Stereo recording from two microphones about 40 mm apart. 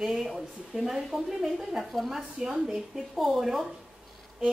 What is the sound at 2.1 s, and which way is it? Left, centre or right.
Speech, centre.